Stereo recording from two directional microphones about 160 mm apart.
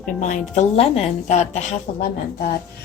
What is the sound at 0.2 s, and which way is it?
A woman's voice, 50° left (ahead or behind).